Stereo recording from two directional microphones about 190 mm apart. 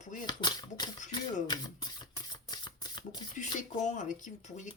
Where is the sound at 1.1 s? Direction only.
20° left (ahead or behind).